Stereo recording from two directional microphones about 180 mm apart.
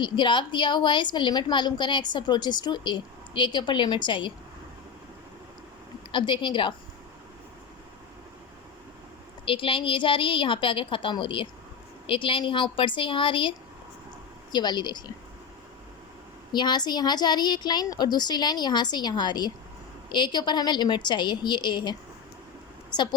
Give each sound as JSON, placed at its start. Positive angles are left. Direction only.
{"t": 0.0, "sound": "a woman's voice", "side_deg": 25}
{"t": 6.1, "sound": "a woman's voice", "side_deg": 25}
{"t": 9.5, "sound": "a woman's voice", "side_deg": 30}
{"t": 14.5, "sound": "a woman's voice", "side_deg": 25}
{"t": 16.5, "sound": "a woman's voice", "side_deg": 25}